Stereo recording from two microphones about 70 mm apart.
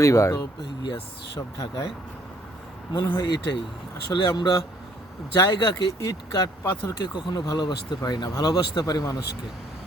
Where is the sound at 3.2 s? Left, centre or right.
Left.